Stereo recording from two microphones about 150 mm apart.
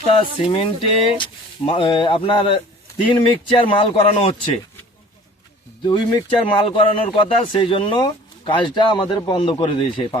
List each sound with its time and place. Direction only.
0.2 s speech: 35° left (ahead or behind)
5.8 s speech: 30° left (ahead or behind)